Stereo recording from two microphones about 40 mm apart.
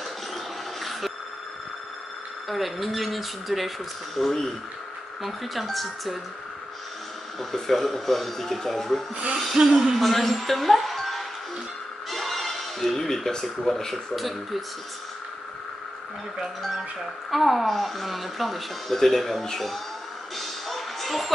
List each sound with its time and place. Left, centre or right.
2.4 s speech: centre
7.3 s speech: centre
9.1 s speech: right
9.4 s a woman's voice: centre
17.3 s speech: centre
20.3 s music: centre